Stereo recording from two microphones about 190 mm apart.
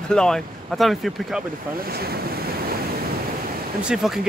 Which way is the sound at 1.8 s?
55° right (ahead or behind).